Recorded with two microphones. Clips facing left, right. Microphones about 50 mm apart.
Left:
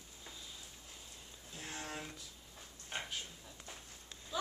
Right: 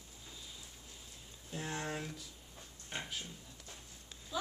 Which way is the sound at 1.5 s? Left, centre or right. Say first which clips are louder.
Right 6 dB; right.